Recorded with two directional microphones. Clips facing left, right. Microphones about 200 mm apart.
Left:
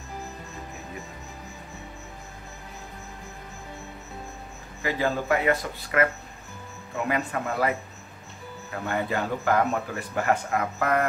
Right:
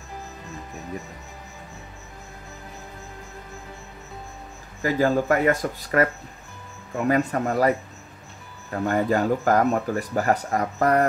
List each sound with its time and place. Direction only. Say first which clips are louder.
4.8 s speech: right 5 dB; 45° right (ahead or behind)
7.1 s speech: right 7 dB; 40° right (ahead or behind)
8.8 s speech: right 7 dB; 40° right (ahead or behind)